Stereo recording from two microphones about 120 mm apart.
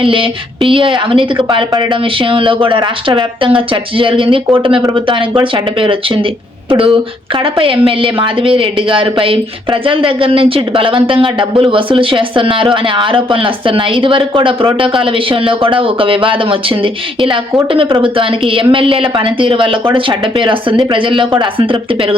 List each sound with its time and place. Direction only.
0.0 s a woman's voice: 45° right (ahead or behind)